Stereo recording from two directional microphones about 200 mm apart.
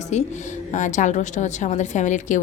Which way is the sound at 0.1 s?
35° left (ahead or behind).